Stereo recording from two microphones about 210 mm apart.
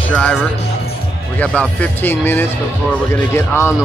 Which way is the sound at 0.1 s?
5° left (ahead or behind).